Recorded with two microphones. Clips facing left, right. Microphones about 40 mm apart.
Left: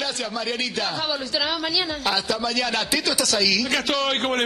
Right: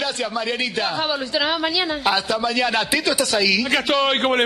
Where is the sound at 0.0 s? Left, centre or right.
Centre.